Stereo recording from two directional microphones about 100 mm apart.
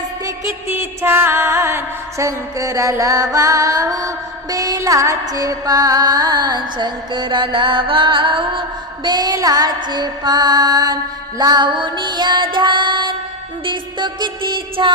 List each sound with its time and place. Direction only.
0.7 s music: 20° right (ahead or behind); by 8.6 s 55° right (ahead or behind)
9.0 s female singing: 40° right (ahead or behind)